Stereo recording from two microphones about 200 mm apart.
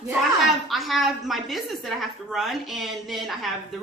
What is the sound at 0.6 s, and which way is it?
A woman's voice, centre (ahead or behind).